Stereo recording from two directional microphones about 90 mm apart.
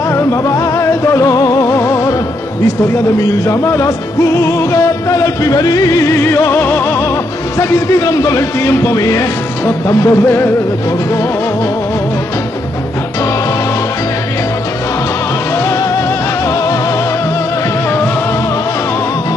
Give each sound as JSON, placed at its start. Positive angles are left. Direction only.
{"t": 0.1, "sound": "music", "side_deg": 35}
{"t": 3.2, "sound": "music", "side_deg": 35}
{"t": 15.5, "sound": "music", "side_deg": 30}